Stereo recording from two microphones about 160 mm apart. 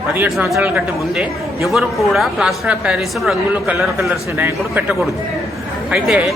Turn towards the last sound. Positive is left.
turn(degrees=-5)  # may be behind; listen again after turning